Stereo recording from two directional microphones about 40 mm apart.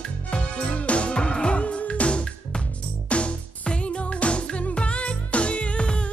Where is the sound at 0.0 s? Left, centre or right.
Left.